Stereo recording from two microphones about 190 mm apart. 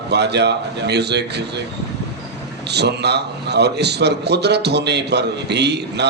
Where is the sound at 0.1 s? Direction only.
60° right (ahead or behind).